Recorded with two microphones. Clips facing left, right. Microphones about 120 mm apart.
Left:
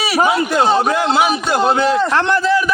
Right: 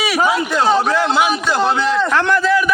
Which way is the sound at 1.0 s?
40° left (ahead or behind).